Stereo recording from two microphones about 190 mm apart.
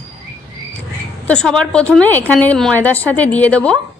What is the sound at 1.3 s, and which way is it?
A woman's voice, 5° left (ahead or behind).